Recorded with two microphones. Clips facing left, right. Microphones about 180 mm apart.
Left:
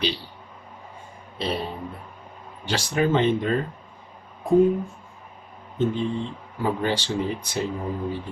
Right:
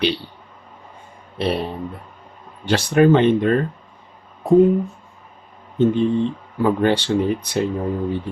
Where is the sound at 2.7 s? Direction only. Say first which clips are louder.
Right 9 dB; 60° right (ahead or behind).